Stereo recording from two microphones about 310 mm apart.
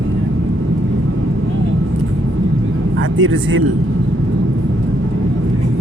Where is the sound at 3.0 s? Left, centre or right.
Right.